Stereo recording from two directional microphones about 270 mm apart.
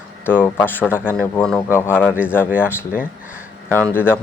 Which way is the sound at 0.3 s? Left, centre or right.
Centre.